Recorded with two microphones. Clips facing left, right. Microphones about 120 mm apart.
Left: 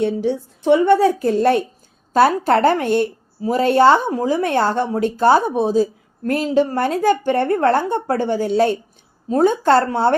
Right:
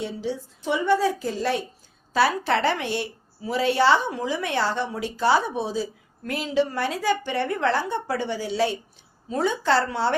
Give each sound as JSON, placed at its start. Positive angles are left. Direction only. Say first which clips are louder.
{"t": 0.0, "sound": "a woman's voice", "louder": "left 10 dB", "side_deg": 55}